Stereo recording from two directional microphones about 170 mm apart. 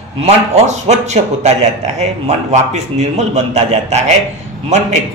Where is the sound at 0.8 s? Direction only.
40° right (ahead or behind).